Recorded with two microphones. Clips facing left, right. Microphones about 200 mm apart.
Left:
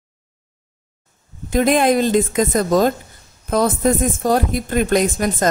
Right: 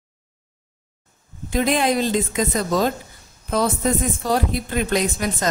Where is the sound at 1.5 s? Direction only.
50° left (ahead or behind).